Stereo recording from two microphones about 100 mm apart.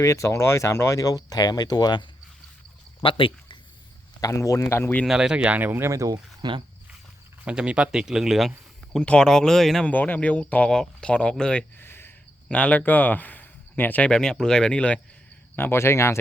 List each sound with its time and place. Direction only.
0.0 s speech: 30° left (ahead or behind); by 2.0 s 45° left (ahead or behind)
3.0 s a sound: 60° left (ahead or behind)
4.2 s a man's voice: 30° left (ahead or behind)
5.0 s speech: 5° right (ahead or behind); by 6.1 s 30° right (ahead or behind)
6.4 s speech: 45° right (ahead or behind)
7.4 s speech: 10° right (ahead or behind)
9.9 s speech: 15° left (ahead or behind)
11.8 s speech: 20° left (ahead or behind)
15.5 s a man's voice: 25° left (ahead or behind)